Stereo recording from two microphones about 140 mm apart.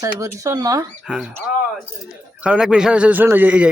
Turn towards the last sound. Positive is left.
turn(degrees=-10)  # may be behind; listen again after turning